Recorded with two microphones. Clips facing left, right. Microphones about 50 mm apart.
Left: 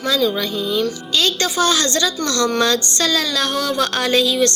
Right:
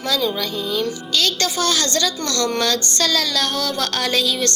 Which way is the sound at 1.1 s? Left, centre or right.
Left.